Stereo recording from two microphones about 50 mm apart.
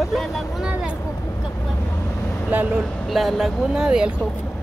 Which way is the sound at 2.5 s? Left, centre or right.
Right.